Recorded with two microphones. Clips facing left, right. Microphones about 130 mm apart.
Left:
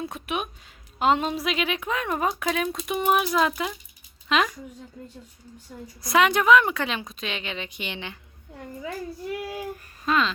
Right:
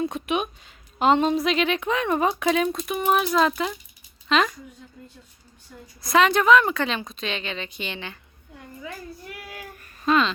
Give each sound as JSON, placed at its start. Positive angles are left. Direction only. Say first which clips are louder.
{"t": 0.0, "sound": "a sound", "louder": "right 5 dB", "side_deg": 5}
{"t": 0.9, "sound": "speech", "louder": "right 3 dB", "side_deg": 5}
{"t": 2.8, "sound": "a woman's voice", "louder": "right 1 dB", "side_deg": 10}
{"t": 6.0, "sound": "a woman's voice", "louder": "right 2 dB", "side_deg": 15}
{"t": 9.3, "sound": "child singing", "louder": "left 8 dB", "side_deg": 25}
{"t": 10.1, "sound": "speech", "louder": "right 3 dB", "side_deg": 0}